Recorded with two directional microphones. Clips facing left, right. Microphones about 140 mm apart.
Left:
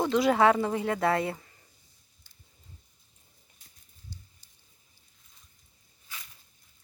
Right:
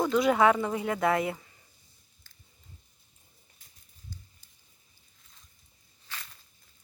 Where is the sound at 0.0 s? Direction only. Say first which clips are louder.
Even; 30° left (ahead or behind).